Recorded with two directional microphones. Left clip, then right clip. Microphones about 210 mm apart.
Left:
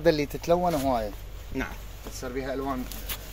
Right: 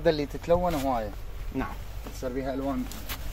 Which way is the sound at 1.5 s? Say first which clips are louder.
Even; 25° right (ahead or behind).